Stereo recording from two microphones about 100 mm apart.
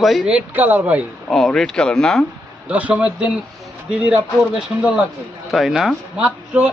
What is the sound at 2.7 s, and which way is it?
Speech, 15° right (ahead or behind).